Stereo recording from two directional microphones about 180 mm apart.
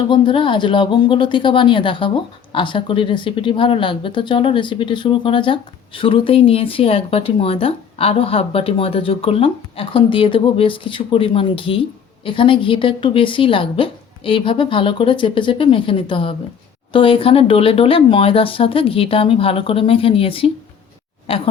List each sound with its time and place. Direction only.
0.1 s speech: 25° left (ahead or behind)